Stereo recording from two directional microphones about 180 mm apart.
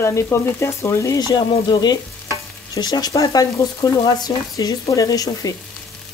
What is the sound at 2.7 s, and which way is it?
Stir, 20° left (ahead or behind).